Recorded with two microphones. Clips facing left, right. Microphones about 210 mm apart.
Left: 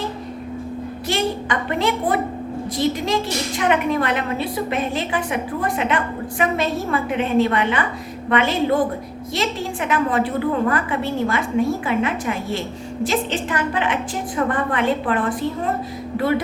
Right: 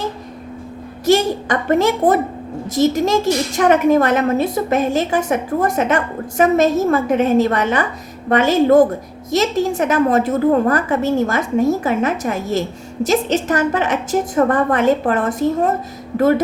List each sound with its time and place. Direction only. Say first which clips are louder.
1.0 s a woman's voice: right 8 dB; 45° right (ahead or behind)